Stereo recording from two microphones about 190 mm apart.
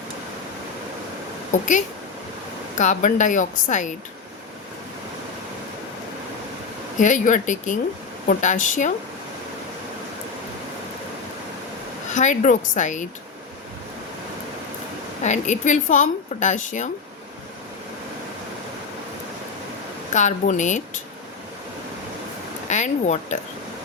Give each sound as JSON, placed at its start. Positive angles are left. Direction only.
{"t": 1.5, "sound": "a woman's voice", "side_deg": 40}
{"t": 2.7, "sound": "a woman's voice", "side_deg": 40}
{"t": 7.0, "sound": "a woman's voice", "side_deg": 40}
{"t": 12.1, "sound": "a woman's voice", "side_deg": 40}
{"t": 15.2, "sound": "a woman's voice", "side_deg": 40}
{"t": 20.1, "sound": "a woman's voice", "side_deg": 40}
{"t": 22.7, "sound": "a woman's voice", "side_deg": 40}